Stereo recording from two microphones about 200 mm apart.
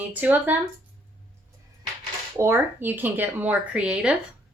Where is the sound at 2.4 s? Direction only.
10° right (ahead or behind).